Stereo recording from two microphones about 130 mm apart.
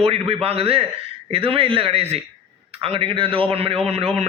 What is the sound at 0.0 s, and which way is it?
A man's voice, 50° right (ahead or behind).